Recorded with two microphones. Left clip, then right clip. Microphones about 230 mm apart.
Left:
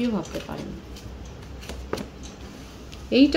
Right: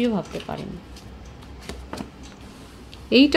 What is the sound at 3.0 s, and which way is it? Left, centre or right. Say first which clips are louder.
Speech: right 2 dB; right.